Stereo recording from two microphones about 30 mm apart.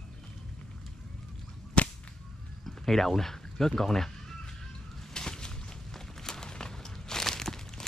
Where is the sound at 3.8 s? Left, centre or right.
Centre.